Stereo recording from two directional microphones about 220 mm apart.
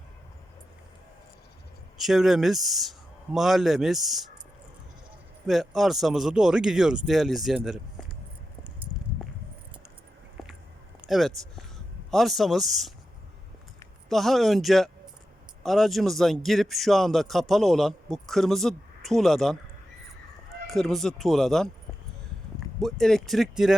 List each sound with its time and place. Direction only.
2.0 s a man's voice: centre (ahead or behind)
5.5 s a man's voice: centre (ahead or behind)
10.4 s biting: centre (ahead or behind)
11.0 s a man's voice: centre (ahead or behind)
14.1 s a man's voice: centre (ahead or behind)
20.7 s a man's voice: centre (ahead or behind)
22.8 s a man's voice: centre (ahead or behind)